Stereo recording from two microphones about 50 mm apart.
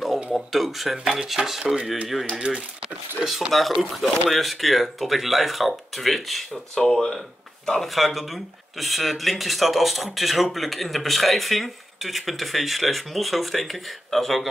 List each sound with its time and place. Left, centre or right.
0.0 s speech: centre
2.3 s speech: centre
3.3 s speech: centre
6.5 s speech: centre
7.9 s speech: centre